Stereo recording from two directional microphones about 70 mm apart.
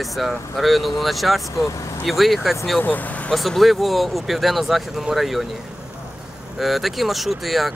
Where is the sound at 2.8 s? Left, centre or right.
Left.